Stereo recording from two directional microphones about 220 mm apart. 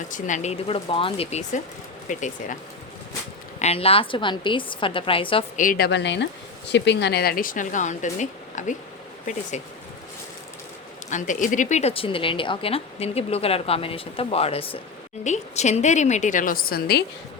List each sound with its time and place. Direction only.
0.1 s a woman's voice: 35° left (ahead or behind)
3.6 s a woman's voice: 25° left (ahead or behind)
5.5 s a woman's voice: 40° left (ahead or behind)
11.1 s a woman's voice: 35° left (ahead or behind)